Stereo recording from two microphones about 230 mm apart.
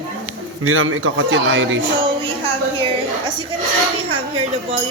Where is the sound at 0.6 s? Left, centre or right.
Right.